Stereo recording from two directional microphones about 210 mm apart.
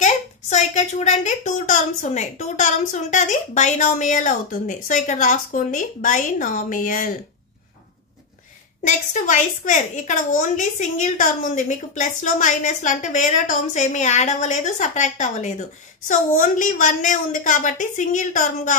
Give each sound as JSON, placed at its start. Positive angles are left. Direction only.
{"t": 0.0, "sound": "a woman's voice", "side_deg": 35}
{"t": 8.8, "sound": "a woman's voice", "side_deg": 35}